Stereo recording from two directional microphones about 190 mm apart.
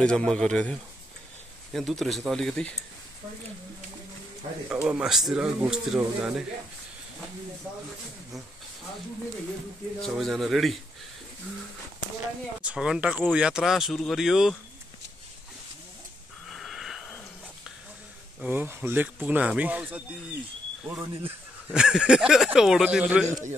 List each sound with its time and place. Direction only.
0.0 s speech: 5° left (ahead or behind)
4.6 s speech: 5° right (ahead or behind)
9.9 s speech: centre (ahead or behind)
12.6 s speech: 5° right (ahead or behind)
16.4 s wheeze: centre (ahead or behind)
18.4 s speech: 10° right (ahead or behind)